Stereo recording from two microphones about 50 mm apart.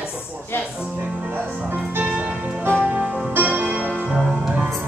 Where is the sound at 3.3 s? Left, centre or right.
Right.